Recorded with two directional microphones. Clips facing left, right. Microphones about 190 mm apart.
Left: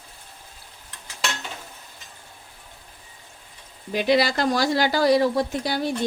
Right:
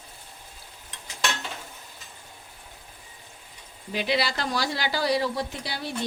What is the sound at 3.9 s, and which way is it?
Speech, 45° left (ahead or behind).